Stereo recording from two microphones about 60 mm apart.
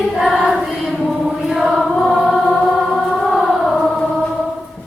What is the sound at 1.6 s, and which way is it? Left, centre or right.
Choir, centre.